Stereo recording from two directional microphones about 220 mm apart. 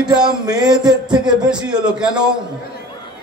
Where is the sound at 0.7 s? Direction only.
20° right (ahead or behind).